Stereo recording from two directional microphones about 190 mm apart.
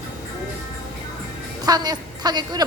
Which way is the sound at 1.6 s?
20° right (ahead or behind).